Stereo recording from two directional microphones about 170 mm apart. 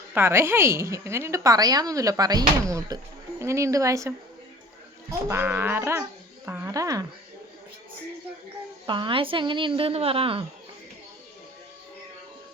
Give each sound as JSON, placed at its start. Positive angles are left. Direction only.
{"t": 0.1, "sound": "a woman's voice", "side_deg": -15}
{"t": 8.9, "sound": "a woman's voice", "side_deg": -30}